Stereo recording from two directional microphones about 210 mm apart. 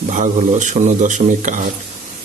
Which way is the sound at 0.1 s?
35° right (ahead or behind).